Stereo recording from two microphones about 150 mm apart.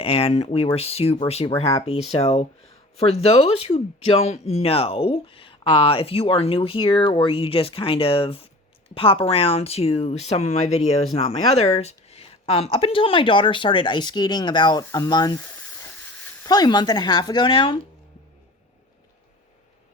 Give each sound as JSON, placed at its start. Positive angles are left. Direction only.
{"t": 0.0, "sound": "speech", "side_deg": 40}